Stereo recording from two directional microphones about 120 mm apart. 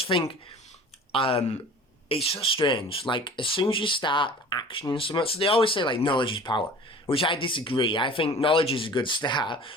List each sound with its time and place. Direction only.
0.0 s speech: 45° left (ahead or behind)